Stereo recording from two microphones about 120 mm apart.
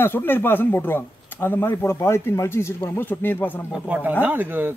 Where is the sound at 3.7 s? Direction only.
10° right (ahead or behind).